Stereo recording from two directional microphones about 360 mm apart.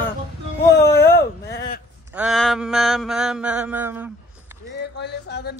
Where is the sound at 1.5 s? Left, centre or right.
Left.